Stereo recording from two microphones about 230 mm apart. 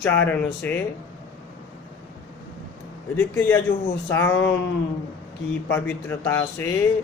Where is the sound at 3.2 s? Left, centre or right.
Centre.